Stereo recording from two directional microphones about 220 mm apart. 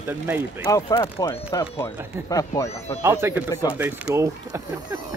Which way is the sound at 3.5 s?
15° left (ahead or behind).